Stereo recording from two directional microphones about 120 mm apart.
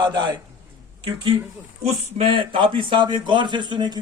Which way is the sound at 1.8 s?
55° right (ahead or behind).